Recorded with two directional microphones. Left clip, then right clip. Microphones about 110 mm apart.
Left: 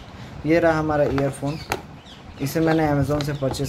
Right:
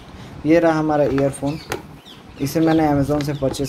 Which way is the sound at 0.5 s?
15° right (ahead or behind).